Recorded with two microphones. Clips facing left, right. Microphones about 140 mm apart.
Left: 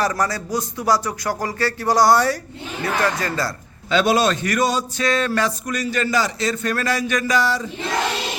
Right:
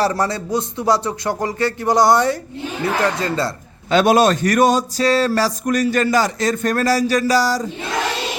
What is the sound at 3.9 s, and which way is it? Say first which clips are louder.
A man's voice: right 4 dB; 45° right (ahead or behind).